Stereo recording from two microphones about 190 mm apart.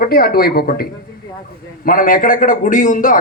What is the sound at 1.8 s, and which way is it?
Speech, 45° left (ahead or behind).